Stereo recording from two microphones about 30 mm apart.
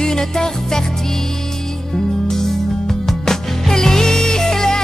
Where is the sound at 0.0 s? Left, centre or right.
Left.